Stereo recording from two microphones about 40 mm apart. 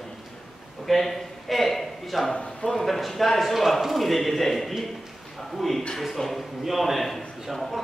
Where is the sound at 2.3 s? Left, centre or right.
Left.